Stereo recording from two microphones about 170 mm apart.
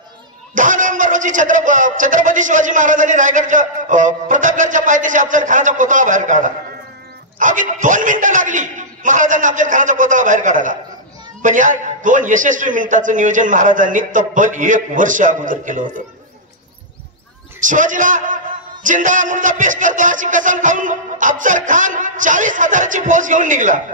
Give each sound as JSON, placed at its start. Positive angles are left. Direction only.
{"t": 0.6, "sound": "a man's voice", "side_deg": -50}
{"t": 17.6, "sound": "a man's voice", "side_deg": -50}